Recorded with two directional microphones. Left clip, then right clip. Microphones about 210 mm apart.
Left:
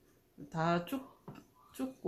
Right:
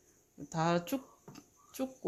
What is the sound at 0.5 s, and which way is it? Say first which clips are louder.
Speech: right 1 dB; 45° right (ahead or behind).